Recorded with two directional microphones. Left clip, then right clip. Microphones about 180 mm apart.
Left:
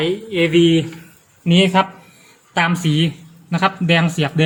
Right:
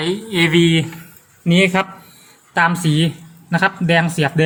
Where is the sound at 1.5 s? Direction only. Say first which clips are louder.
Left 1 dB; 15° right (ahead or behind).